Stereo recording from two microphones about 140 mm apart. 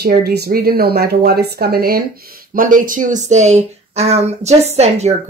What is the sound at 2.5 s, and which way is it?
Speech, 75° right (ahead or behind).